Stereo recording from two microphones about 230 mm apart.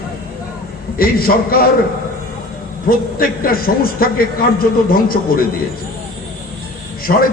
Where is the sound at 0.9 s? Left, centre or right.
Left.